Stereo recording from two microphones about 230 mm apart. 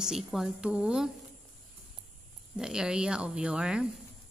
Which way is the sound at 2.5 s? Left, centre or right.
Centre.